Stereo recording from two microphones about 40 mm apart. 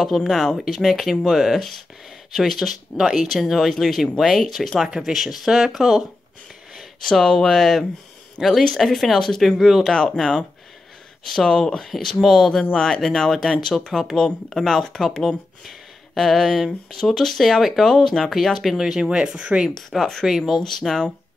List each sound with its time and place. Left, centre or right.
0.2 s speech: centre
7.0 s speech: centre
10.1 s speech: centre
16.2 s speech: centre
17.8 s speech: centre
18.2 s speech: centre
18.8 s speech: centre
19.9 s speech: centre
20.2 s speech: centre
20.6 s speech: centre